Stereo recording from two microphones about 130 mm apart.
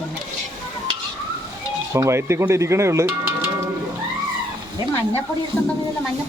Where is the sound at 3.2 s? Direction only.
15° right (ahead or behind).